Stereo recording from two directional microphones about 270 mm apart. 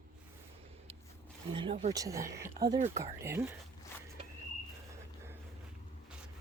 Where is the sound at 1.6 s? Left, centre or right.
Right.